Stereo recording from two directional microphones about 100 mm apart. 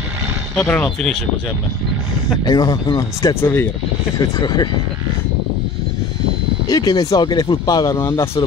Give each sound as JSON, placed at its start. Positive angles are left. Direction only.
{"t": 0.6, "sound": "speech", "side_deg": 15}
{"t": 2.4, "sound": "speech", "side_deg": 40}
{"t": 4.2, "sound": "speech", "side_deg": 45}
{"t": 6.7, "sound": "speech", "side_deg": 40}